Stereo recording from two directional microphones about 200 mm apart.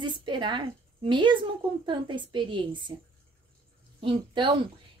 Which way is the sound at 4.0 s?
25° right (ahead or behind).